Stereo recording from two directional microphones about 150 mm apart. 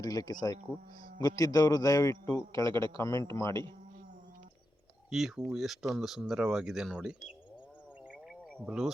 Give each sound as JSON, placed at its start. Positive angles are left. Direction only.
{"t": 0.0, "sound": "a man's voice", "side_deg": 25}
{"t": 2.6, "sound": "a man's voice", "side_deg": -30}
{"t": 3.2, "sound": "a man's voice", "side_deg": 20}
{"t": 5.1, "sound": "speech", "side_deg": 0}
{"t": 8.6, "sound": "speech", "side_deg": -5}